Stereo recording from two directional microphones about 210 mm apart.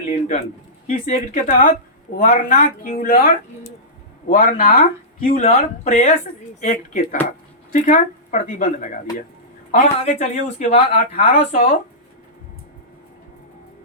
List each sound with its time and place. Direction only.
0.1 s a sound: 30° left (ahead or behind)
0.9 s speech: 35° left (ahead or behind)
10.0 s speech: 35° left (ahead or behind)